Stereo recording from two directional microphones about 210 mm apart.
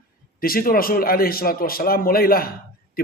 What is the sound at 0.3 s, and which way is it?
A man's voice, 45° left (ahead or behind).